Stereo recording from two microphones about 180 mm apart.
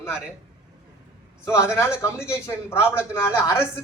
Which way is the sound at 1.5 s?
15° left (ahead or behind).